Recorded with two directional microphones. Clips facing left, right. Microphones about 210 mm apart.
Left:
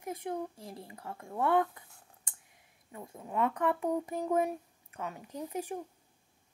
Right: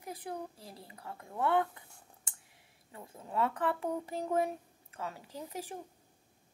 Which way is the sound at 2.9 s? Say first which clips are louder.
Left 2 dB; 20° left (ahead or behind).